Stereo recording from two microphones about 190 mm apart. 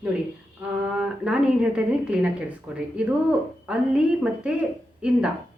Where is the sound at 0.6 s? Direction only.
5° right (ahead or behind).